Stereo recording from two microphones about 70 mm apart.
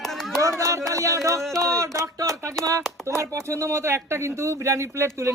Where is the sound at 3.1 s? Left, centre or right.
Right.